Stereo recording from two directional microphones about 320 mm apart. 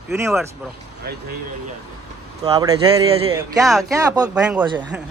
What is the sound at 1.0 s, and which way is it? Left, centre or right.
Speech, right.